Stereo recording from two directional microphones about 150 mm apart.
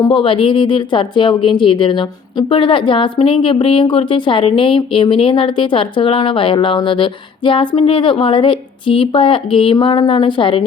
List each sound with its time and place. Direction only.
0.1 s a woman's voice: 35° left (ahead or behind)